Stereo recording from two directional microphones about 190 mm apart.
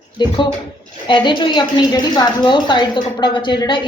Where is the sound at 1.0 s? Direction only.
25° left (ahead or behind).